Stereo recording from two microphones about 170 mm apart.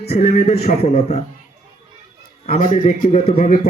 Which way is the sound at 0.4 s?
40° left (ahead or behind).